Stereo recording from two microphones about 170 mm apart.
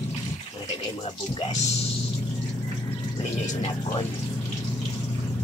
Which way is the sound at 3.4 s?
35° left (ahead or behind).